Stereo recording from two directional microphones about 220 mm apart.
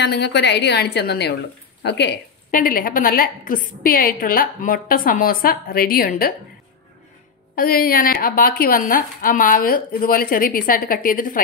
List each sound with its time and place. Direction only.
0.0 s a woman's voice: 50° left (ahead or behind)
7.5 s a woman's voice: 40° left (ahead or behind)